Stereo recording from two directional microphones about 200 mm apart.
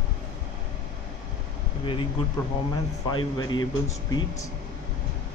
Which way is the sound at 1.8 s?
25° left (ahead or behind).